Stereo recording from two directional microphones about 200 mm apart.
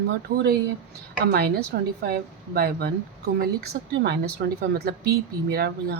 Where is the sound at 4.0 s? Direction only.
55° right (ahead or behind).